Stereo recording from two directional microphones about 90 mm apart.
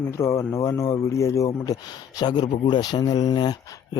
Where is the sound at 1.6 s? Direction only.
45° left (ahead or behind).